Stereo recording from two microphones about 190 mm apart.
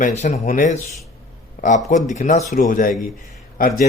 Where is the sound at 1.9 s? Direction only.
40° left (ahead or behind).